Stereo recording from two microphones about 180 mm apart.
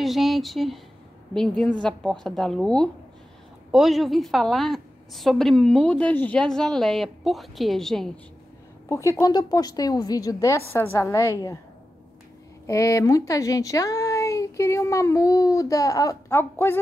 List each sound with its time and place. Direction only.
0.0 s a woman's voice: centre (ahead or behind)
8.8 s a woman's voice: 15° left (ahead or behind)
12.6 s speech: 15° left (ahead or behind)